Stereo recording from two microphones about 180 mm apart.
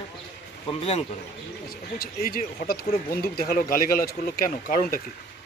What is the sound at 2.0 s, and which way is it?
Speech, 55° left (ahead or behind).